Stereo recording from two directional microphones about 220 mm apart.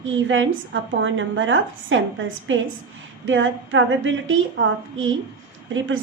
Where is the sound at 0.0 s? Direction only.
60° right (ahead or behind).